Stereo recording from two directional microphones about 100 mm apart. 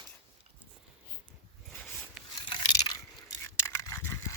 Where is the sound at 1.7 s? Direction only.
15° left (ahead or behind).